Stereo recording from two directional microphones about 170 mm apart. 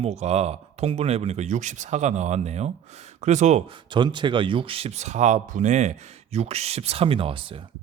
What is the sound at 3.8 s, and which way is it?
Speech, 25° right (ahead or behind).